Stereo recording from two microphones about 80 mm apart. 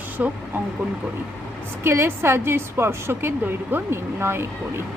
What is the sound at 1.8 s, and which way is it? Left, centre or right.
A woman's voice, right.